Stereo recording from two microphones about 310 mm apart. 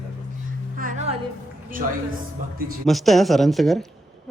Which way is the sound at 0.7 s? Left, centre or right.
Right.